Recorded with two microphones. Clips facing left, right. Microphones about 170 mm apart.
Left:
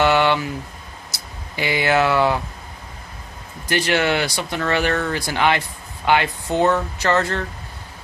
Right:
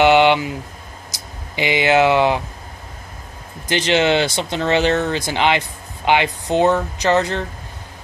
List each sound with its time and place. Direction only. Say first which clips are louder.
0.0 s speech: right 4 dB; 20° right (ahead or behind)
3.6 s speech: right 3 dB; 20° right (ahead or behind)